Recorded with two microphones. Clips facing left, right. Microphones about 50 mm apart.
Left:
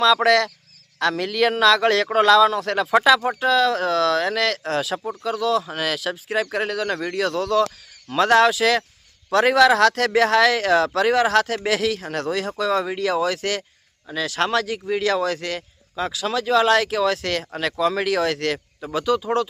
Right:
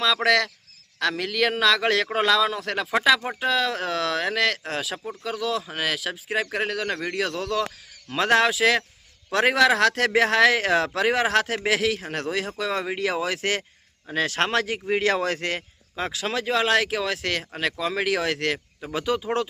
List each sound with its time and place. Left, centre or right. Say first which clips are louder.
0.0 s a man's voice: left 4 dB; centre
3.2 s speech: left 5 dB; centre